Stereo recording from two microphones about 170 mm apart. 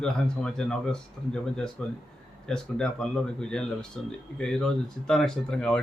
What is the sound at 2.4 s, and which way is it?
Speech, 5° left (ahead or behind).